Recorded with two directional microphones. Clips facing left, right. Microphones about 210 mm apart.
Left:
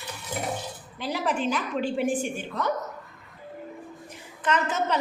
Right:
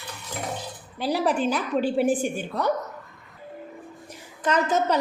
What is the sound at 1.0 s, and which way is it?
A woman's voice, 35° right (ahead or behind).